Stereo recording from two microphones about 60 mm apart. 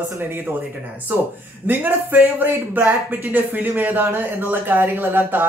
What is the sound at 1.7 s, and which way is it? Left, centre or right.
Speech, right.